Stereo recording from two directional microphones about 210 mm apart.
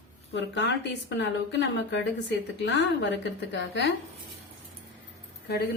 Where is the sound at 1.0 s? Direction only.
60° left (ahead or behind).